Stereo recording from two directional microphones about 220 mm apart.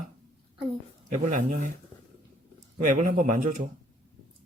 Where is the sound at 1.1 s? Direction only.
35° right (ahead or behind).